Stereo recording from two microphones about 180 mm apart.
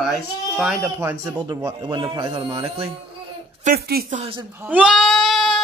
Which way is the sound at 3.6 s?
55° right (ahead or behind).